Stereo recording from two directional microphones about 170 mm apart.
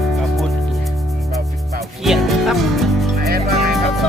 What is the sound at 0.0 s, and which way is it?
Music, centre (ahead or behind).